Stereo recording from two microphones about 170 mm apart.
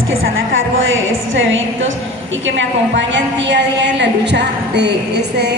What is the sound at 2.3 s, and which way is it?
A woman's voice, 90° right.